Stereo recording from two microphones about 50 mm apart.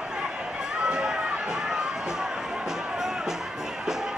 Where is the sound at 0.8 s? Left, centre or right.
Centre.